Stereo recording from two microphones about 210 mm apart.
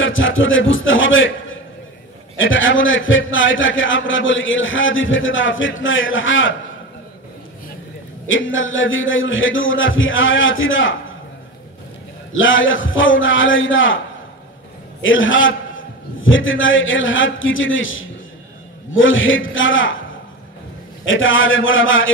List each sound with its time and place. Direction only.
0.0 s a man's voice: 65° left (ahead or behind)
8.3 s a man's voice: 65° left (ahead or behind)
12.3 s a man's voice: 65° left (ahead or behind)
15.0 s a man's voice: 65° left (ahead or behind)
21.0 s a man's voice: 65° left (ahead or behind)